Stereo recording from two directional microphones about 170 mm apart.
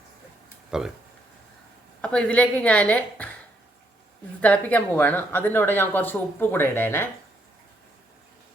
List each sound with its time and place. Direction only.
0.7 s speech: 5° right (ahead or behind)
2.0 s speech: 5° left (ahead or behind)
4.4 s speech: 10° left (ahead or behind)